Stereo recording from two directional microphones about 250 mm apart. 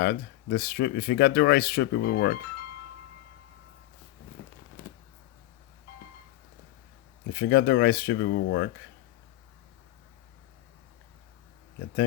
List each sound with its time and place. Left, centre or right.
0.0 s speech: left
4.4 s a sound: left
7.3 s speech: left